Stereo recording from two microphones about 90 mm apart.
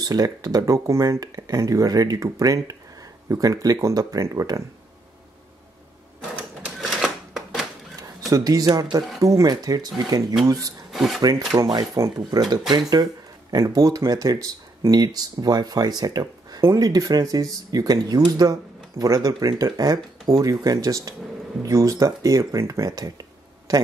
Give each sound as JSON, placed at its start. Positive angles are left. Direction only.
{"t": 0.0, "sound": "speech", "side_deg": -45}
{"t": 6.2, "sound": "typewriter", "side_deg": -10}
{"t": 8.3, "sound": "speech", "side_deg": -45}
{"t": 10.9, "sound": "drawer open or close", "side_deg": 0}
{"t": 11.1, "sound": "speech", "side_deg": -45}